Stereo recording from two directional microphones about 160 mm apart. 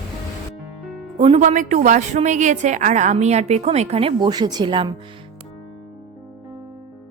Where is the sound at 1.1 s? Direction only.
35° right (ahead or behind).